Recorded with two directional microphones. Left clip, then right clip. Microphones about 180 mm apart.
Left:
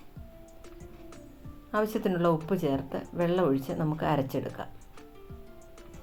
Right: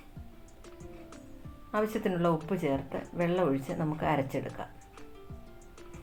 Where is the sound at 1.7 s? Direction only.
30° left (ahead or behind).